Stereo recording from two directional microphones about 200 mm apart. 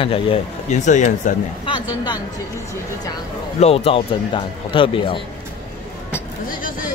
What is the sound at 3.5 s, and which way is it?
Speech, 30° left (ahead or behind).